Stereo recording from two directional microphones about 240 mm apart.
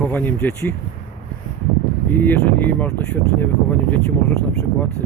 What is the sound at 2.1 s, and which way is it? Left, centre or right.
Speech, centre.